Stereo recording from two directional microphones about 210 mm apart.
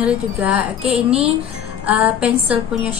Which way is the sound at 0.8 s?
30° right (ahead or behind).